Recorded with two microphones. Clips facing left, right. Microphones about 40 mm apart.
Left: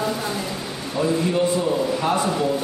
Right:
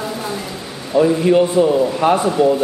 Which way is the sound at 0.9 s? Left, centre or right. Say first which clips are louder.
Right 8 dB; right.